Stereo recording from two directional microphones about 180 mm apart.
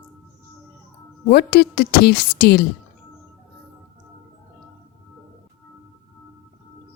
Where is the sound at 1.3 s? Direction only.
65° left (ahead or behind).